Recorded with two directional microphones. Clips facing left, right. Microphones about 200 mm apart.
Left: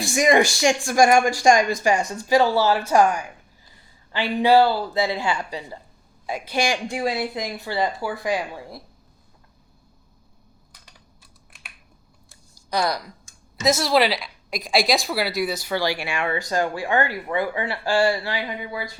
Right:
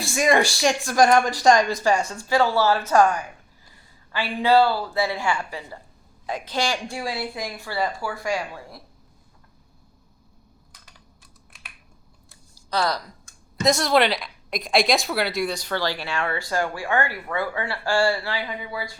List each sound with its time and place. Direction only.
0.0 s a woman's voice: 15° left (ahead or behind)
12.7 s a woman's voice: 10° left (ahead or behind)